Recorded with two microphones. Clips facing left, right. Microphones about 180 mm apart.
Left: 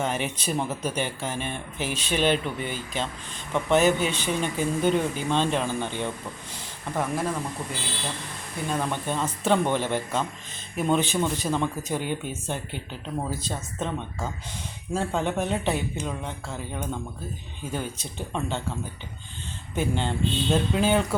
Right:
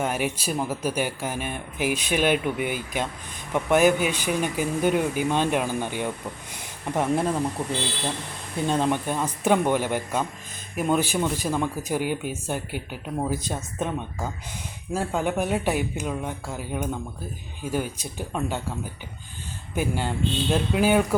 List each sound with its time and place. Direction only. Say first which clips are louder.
0.0 s speech: right 2 dB; 10° right (ahead or behind)
6.9 s speech: right 4 dB; 25° right (ahead or behind)
8.6 s speech: right 4 dB; 25° right (ahead or behind)
8.9 s speech: right 3 dB; 15° right (ahead or behind)
19.7 s speech: even; 10° right (ahead or behind)